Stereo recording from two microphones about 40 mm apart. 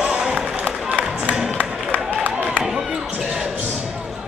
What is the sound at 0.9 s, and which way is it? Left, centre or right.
Music, right.